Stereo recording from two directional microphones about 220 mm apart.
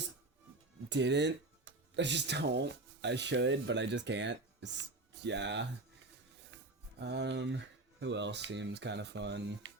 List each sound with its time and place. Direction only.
0.9 s speech: 55° right (ahead or behind)
7.0 s speech: 50° right (ahead or behind)